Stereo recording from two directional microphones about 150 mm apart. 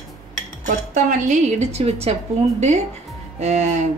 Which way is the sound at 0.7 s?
55° right (ahead or behind).